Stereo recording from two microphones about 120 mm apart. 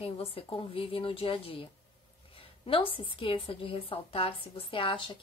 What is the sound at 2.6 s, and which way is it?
Speech, 50° left (ahead or behind).